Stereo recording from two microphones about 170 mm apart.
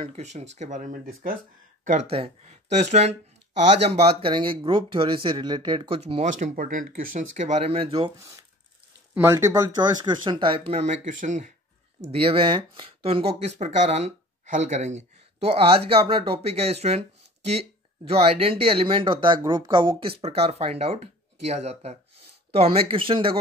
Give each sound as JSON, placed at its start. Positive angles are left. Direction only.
{"t": 0.0, "sound": "speech", "side_deg": -40}
{"t": 1.9, "sound": "speech", "side_deg": -40}
{"t": 9.1, "sound": "speech", "side_deg": -15}
{"t": 12.0, "sound": "speech", "side_deg": -35}